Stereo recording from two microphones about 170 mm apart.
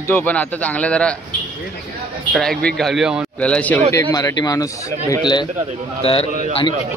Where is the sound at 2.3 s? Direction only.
Centre (ahead or behind).